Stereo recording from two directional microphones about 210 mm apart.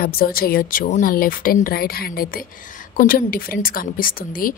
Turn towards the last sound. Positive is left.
turn(degrees=40)  # may be behind; listen again after turning